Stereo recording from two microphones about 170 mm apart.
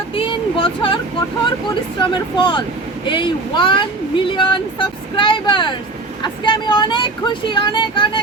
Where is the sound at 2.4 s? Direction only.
25° left (ahead or behind).